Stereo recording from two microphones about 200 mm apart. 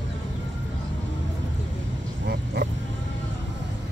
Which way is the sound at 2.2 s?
55° right (ahead or behind).